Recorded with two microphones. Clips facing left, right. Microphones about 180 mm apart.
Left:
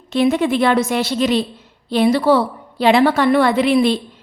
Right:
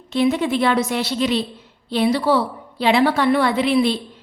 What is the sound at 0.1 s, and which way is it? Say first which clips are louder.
A woman's voice: left 3 dB; 50° left (ahead or behind).